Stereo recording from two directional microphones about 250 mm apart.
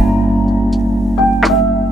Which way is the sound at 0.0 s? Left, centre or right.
Centre.